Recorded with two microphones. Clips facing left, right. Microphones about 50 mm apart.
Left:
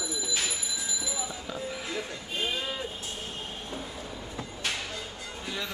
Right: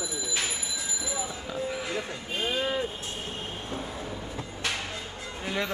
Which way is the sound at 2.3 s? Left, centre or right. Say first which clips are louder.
Right 4 dB; right.